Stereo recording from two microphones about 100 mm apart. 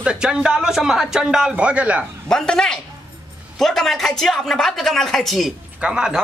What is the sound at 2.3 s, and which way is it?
A man's voice, 5° left (ahead or behind).